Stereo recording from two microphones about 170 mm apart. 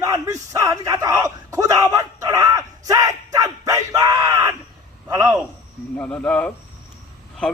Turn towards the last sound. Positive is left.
turn(degrees=5)  # may be behind; listen again after turning